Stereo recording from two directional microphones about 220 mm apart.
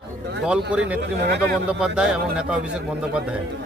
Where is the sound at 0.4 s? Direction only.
5° right (ahead or behind).